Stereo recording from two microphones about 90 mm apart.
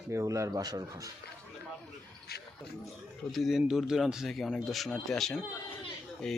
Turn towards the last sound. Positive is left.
turn(degrees=10)  # may be behind; listen again after turning